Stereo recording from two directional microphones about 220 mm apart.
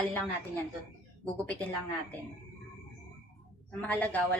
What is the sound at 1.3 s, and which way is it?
Speech, 5° left (ahead or behind).